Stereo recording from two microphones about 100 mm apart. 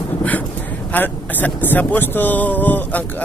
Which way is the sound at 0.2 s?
15° left (ahead or behind).